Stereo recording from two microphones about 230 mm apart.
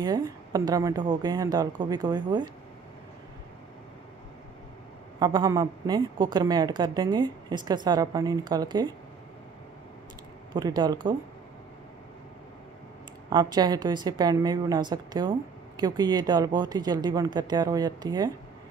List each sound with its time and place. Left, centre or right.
0.0 s a woman's voice: centre
5.2 s a woman's voice: centre
10.5 s speech: centre
13.3 s a woman's voice: centre